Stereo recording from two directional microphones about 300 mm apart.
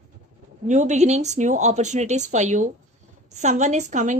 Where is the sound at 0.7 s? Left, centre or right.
Right.